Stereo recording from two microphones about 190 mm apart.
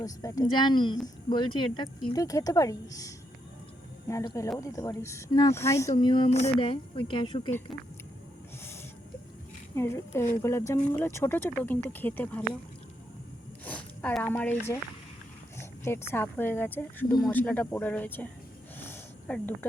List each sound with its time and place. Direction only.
0.0 s speech: 15° left (ahead or behind)
4.1 s a woman's voice: 15° left (ahead or behind)
9.7 s a woman's voice: 15° left (ahead or behind)
13.7 s a woman's voice: 5° left (ahead or behind)
18.8 s a sound: 10° left (ahead or behind)